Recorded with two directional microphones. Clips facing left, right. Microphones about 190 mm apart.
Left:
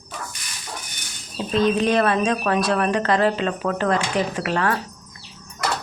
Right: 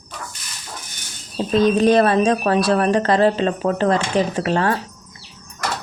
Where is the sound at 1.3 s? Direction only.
40° right (ahead or behind).